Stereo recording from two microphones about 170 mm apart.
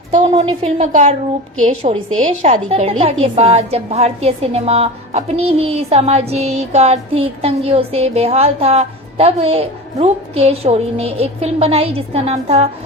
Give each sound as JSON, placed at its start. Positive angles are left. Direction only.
{"t": 0.1, "sound": "a woman's voice", "side_deg": -40}